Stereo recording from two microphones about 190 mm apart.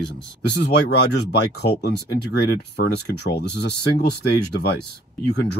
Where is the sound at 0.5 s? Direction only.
60° left (ahead or behind).